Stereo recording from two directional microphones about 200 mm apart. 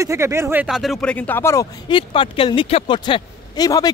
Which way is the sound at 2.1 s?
25° left (ahead or behind).